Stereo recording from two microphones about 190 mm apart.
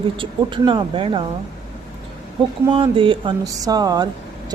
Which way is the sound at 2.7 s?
25° right (ahead or behind).